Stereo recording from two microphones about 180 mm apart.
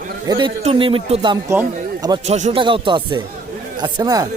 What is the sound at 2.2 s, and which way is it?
A man's voice, 40° right (ahead or behind).